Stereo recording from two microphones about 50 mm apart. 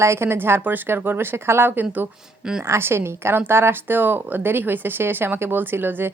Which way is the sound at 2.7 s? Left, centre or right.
Right.